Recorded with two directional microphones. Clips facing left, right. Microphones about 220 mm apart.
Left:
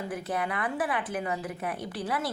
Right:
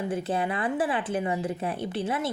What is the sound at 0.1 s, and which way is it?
Speech, 25° right (ahead or behind).